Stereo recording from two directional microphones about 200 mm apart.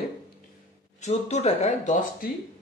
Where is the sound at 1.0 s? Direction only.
35° left (ahead or behind).